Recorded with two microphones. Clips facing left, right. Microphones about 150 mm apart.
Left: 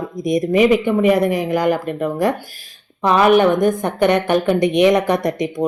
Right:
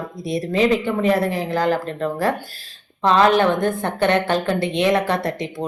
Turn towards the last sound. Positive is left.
turn(degrees=20)  # may be behind; listen again after turning